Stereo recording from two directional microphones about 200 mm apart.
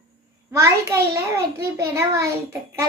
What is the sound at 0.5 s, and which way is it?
A child's voice, 15° right (ahead or behind).